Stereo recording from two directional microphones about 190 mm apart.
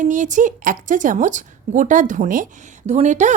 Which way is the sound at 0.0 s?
40° right (ahead or behind).